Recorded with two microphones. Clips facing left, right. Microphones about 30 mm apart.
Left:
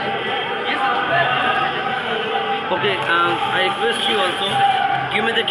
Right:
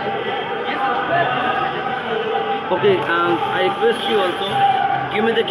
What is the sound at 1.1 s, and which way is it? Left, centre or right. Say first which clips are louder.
Music: left 1 dB; left.